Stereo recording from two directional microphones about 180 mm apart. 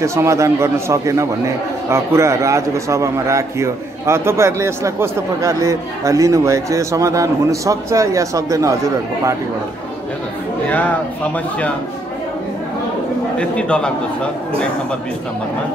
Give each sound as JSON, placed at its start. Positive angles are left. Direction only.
{"t": 0.0, "sound": "a man's voice", "side_deg": -15}
{"t": 13.4, "sound": "a man's voice", "side_deg": 5}